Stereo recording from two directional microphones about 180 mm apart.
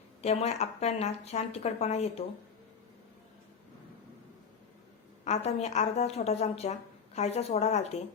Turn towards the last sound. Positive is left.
turn(degrees=35)  # may be behind; listen again after turning